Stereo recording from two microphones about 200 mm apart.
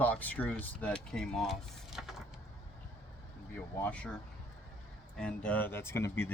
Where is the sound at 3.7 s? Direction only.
10° left (ahead or behind).